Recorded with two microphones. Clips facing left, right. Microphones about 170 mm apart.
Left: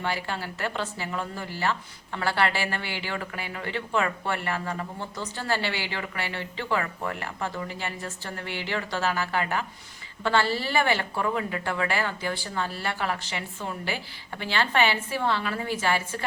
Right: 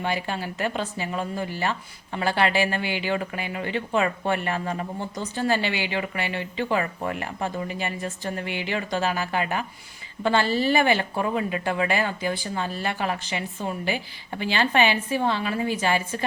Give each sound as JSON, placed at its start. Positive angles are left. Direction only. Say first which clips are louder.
{"t": 0.0, "sound": "speech", "louder": "right 3 dB", "side_deg": -20}